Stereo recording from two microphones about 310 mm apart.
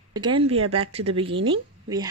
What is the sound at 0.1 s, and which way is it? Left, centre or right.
Speech, centre.